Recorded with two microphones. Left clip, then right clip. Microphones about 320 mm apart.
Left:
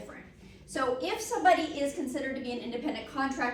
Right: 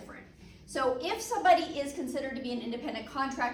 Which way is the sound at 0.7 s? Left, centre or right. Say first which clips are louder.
Even; centre.